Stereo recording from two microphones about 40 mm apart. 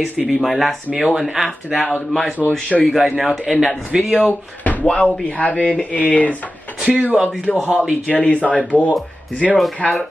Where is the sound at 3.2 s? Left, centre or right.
Centre.